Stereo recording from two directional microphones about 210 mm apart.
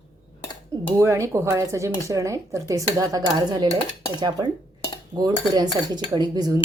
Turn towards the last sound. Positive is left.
turn(degrees=-20)  # may be behind; listen again after turning